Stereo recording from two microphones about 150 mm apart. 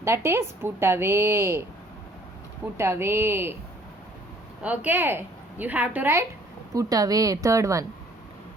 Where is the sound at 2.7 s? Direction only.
15° right (ahead or behind).